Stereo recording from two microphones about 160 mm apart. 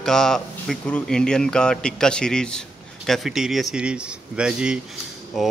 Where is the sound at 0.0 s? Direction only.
5° left (ahead or behind).